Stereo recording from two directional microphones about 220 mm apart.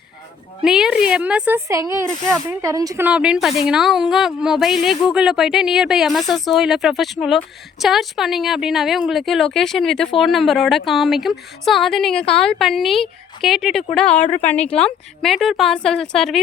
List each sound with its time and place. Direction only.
0.6 s a woman's voice: centre (ahead or behind)